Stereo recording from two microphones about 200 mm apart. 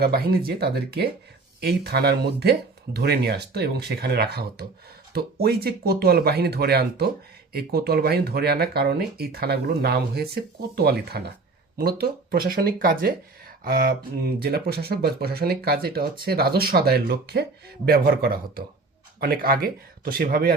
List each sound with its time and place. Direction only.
0.0 s speech: 50° right (ahead or behind)